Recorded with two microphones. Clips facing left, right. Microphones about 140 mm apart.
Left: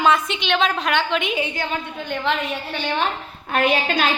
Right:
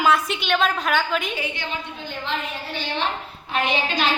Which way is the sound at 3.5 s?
55° left (ahead or behind).